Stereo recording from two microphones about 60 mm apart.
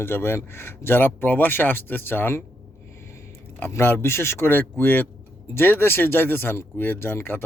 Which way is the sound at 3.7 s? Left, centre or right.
Left.